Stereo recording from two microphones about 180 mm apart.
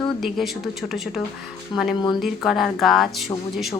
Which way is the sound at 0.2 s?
Centre (ahead or behind).